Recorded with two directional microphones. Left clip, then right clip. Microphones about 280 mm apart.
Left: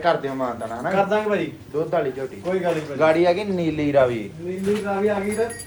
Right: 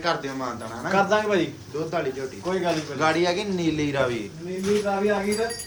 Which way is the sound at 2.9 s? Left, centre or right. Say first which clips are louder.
Left 6 dB; centre.